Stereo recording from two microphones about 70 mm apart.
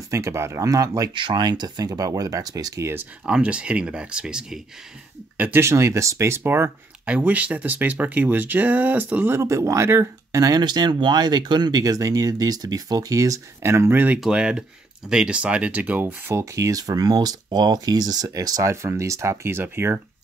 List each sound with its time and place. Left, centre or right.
0.1 s speech: right
0.6 s speech: right
3.3 s speech: centre
5.6 s speech: right
7.1 s speech: right
9.4 s speech: right
10.4 s speech: right
13.7 s speech: right
14.2 s speech: centre; by 16.4 s right
16.5 s speech: right
18.7 s speech: right